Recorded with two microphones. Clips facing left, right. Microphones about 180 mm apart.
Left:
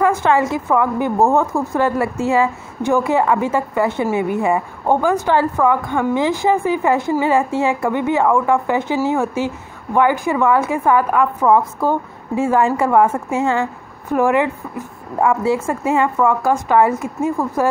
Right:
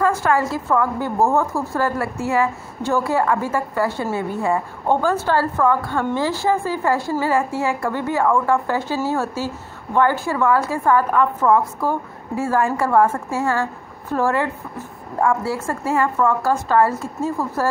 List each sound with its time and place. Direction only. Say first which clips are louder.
0.0 s a woman's voice: left 3 dB; 20° left (ahead or behind)